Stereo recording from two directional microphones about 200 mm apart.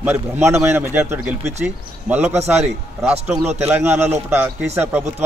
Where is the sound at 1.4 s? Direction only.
35° right (ahead or behind).